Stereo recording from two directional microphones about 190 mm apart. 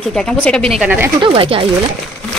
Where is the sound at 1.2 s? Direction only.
25° right (ahead or behind).